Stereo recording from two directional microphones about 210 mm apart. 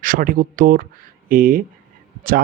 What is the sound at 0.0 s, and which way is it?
Speech, 40° right (ahead or behind).